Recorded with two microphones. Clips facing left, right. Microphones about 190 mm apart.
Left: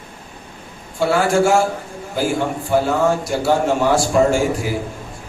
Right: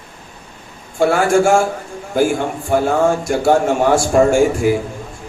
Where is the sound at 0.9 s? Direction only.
50° right (ahead or behind).